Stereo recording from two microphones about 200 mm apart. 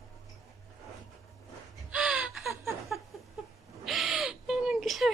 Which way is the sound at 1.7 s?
5° right (ahead or behind).